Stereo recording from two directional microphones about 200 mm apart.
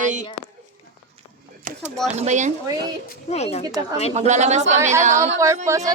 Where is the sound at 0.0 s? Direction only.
40° right (ahead or behind).